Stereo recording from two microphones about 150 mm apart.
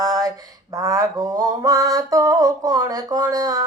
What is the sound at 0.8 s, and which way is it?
Mantra, 25° right (ahead or behind).